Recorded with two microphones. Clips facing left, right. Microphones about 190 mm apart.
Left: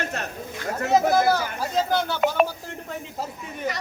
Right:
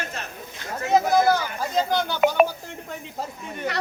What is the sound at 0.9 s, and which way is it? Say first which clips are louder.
Speech: right 1 dB; 5° left (ahead or behind).